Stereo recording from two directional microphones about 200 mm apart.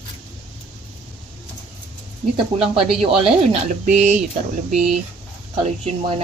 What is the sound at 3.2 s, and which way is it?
Speech, 40° right (ahead or behind).